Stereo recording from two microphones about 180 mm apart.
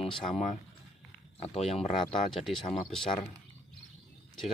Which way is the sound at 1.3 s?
35° left (ahead or behind).